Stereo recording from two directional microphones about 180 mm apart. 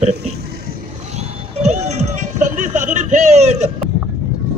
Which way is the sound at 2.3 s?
45° right (ahead or behind).